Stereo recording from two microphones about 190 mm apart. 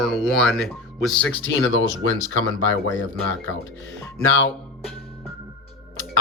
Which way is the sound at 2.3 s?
90° left.